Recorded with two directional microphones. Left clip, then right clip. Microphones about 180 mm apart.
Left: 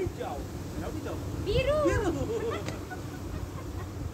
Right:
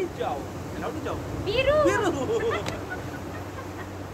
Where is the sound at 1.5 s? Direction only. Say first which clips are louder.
Right 5 dB; 40° right (ahead or behind).